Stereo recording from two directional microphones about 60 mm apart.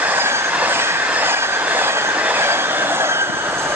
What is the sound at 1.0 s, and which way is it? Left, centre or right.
Train, right.